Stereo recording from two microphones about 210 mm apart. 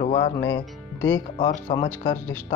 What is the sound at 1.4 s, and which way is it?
Speech, 35° left (ahead or behind).